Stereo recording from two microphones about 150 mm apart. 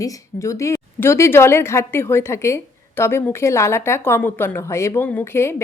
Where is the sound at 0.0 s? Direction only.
20° left (ahead or behind).